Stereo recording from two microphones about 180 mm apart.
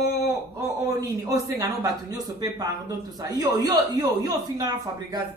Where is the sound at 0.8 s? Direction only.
20° right (ahead or behind).